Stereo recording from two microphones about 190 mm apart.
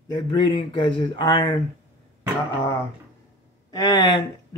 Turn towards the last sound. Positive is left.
turn(degrees=20)  # may be behind; listen again after turning